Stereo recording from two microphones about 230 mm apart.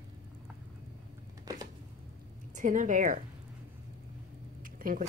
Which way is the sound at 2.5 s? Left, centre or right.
Right.